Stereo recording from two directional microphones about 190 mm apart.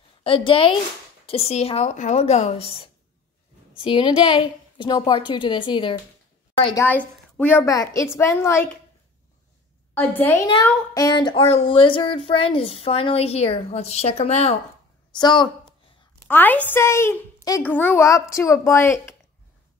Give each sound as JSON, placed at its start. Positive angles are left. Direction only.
{"t": 0.2, "sound": "a woman's voice", "side_deg": 30}
{"t": 3.7, "sound": "a child's voice", "side_deg": 25}
{"t": 9.9, "sound": "a child's voice", "side_deg": 10}
{"t": 15.1, "sound": "speech", "side_deg": 20}
{"t": 16.3, "sound": "a child's voice", "side_deg": 10}